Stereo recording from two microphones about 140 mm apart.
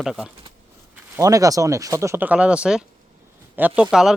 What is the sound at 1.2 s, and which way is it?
Speech, 25° right (ahead or behind).